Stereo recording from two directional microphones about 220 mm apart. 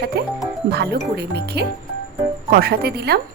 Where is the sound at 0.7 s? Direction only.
50° right (ahead or behind).